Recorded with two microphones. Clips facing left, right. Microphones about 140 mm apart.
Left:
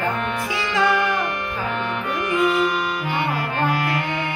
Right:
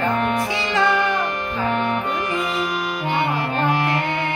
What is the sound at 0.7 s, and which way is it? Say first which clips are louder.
Music: even; 10° left (ahead or behind).